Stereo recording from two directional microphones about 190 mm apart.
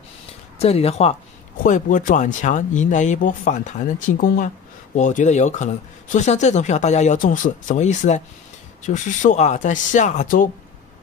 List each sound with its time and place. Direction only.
0.6 s speech: 30° left (ahead or behind)